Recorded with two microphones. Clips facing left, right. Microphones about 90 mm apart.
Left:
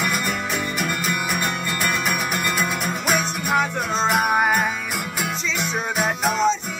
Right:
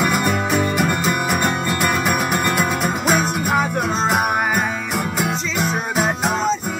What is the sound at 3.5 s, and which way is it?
Music, 10° right (ahead or behind).